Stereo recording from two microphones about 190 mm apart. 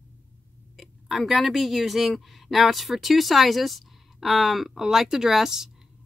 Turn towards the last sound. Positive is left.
turn(degrees=0)  # may be behind; listen again after turning